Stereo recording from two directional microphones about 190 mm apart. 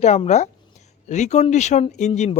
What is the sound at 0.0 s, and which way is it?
Speech, 35° left (ahead or behind).